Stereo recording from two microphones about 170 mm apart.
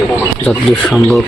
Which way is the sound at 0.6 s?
Centre (ahead or behind).